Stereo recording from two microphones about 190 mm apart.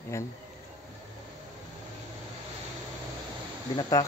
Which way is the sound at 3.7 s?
20° left (ahead or behind).